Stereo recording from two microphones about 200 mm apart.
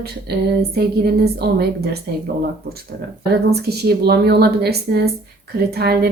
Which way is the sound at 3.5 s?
55° right (ahead or behind).